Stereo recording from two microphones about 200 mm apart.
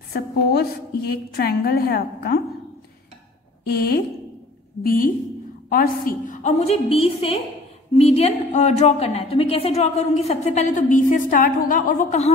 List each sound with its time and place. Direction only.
0.1 s a woman's voice: 55° left (ahead or behind)
4.8 s a woman's voice: 45° left (ahead or behind)